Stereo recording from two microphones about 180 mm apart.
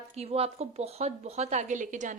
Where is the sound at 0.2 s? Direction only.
35° right (ahead or behind).